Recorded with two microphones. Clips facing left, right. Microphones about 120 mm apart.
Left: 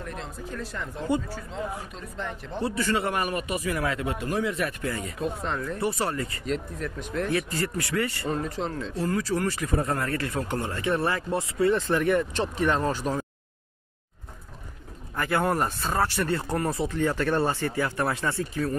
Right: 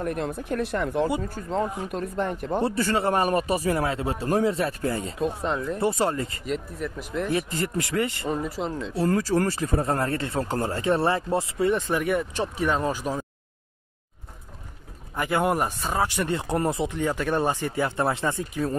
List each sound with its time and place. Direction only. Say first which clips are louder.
0.0 s speech: right 8 dB; 55° right (ahead or behind)
1.3 s speech: right 6 dB; 50° right (ahead or behind)
2.6 s speech: right 1 dB; 35° right (ahead or behind)
6.4 s speech: even; 5° right (ahead or behind)
7.2 s speech: right 2 dB; 25° right (ahead or behind)
8.3 s speech: right 1 dB; 10° right (ahead or behind)
9.0 s speech: right 4 dB; 35° right (ahead or behind)
11.7 s speech: left 2 dB; 10° right (ahead or behind)
15.1 s speech: right 1 dB; 15° right (ahead or behind)